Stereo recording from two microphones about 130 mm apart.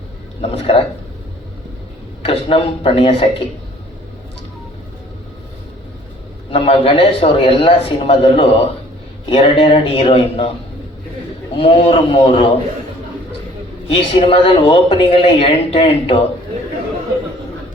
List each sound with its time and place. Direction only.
0.4 s a man's voice: 45° left (ahead or behind)
2.2 s a man's voice: 45° left (ahead or behind)
6.5 s a man's voice: 45° left (ahead or behind)
11.5 s a man's voice: 45° left (ahead or behind)
13.8 s a man's voice: 45° left (ahead or behind)